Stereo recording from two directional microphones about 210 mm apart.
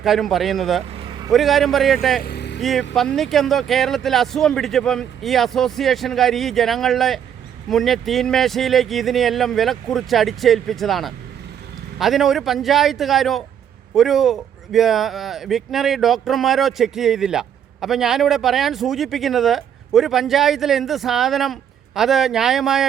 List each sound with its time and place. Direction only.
0.0 s speech: centre (ahead or behind)
2.2 s vehicle: 50° left (ahead or behind)
2.6 s speech: centre (ahead or behind)